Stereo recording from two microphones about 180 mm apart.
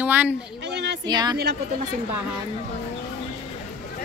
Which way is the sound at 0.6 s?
75° right (ahead or behind).